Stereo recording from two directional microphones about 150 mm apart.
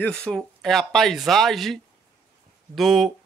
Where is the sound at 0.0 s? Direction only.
5° left (ahead or behind).